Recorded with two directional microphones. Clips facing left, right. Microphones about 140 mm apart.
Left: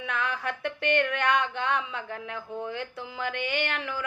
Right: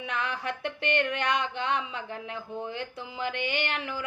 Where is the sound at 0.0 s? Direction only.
20° right (ahead or behind).